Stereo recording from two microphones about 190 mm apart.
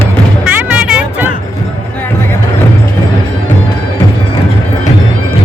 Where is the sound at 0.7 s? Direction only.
5° right (ahead or behind).